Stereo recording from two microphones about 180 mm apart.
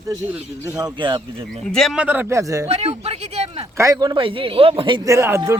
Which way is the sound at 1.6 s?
5° left (ahead or behind).